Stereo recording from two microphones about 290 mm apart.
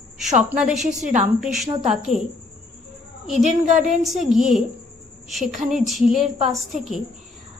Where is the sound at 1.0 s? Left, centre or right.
Right.